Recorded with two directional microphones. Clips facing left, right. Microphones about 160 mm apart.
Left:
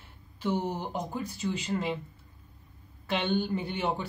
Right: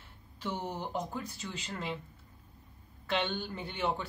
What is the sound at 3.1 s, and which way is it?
Speech, 10° left (ahead or behind).